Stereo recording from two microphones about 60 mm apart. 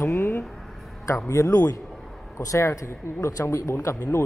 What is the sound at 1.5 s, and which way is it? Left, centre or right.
Speech, left.